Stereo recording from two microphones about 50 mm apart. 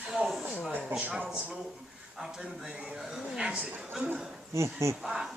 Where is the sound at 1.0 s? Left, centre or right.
Right.